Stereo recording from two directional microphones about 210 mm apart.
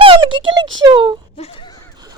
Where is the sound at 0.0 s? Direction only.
25° right (ahead or behind).